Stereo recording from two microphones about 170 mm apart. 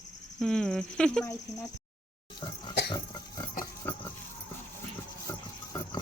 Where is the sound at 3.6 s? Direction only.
55° left (ahead or behind).